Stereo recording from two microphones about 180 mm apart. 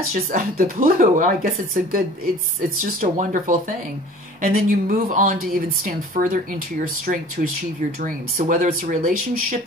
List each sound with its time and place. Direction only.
0.1 s speech: 55° right (ahead or behind)